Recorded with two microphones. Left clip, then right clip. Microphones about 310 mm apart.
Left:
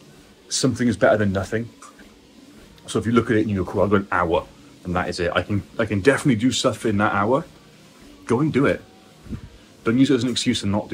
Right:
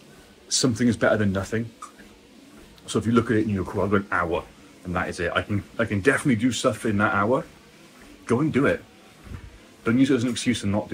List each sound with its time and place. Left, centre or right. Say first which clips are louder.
0.5 s speech: left 1 dB; centre
2.9 s speech: left 2 dB; centre
9.8 s speech: left 2 dB; centre